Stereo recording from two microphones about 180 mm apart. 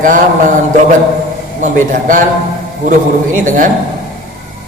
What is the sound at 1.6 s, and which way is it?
Speech, 45° right (ahead or behind).